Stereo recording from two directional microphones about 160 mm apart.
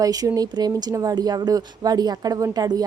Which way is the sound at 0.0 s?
20° right (ahead or behind).